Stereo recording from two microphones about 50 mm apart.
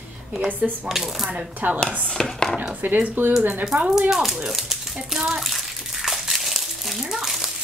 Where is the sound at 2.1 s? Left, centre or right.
Centre.